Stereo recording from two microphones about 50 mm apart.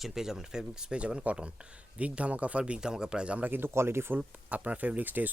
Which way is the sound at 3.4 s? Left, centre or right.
Right.